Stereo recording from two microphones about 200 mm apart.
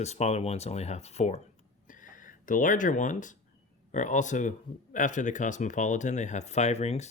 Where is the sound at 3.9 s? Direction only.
40° left (ahead or behind).